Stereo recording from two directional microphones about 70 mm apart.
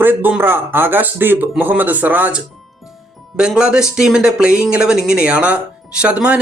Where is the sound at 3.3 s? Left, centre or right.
Centre.